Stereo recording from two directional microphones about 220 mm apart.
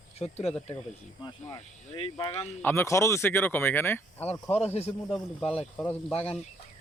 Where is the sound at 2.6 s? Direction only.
10° left (ahead or behind).